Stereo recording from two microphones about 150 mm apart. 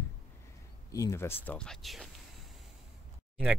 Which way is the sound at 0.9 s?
20° left (ahead or behind).